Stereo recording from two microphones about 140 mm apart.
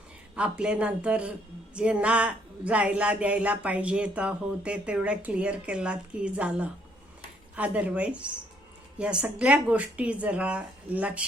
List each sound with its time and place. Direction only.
0.3 s speech: 10° right (ahead or behind)